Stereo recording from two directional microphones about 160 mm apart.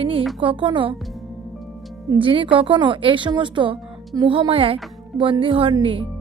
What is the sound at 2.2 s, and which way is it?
Speech, 30° right (ahead or behind).